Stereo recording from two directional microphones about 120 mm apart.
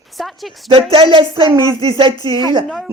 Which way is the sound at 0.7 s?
50° right (ahead or behind).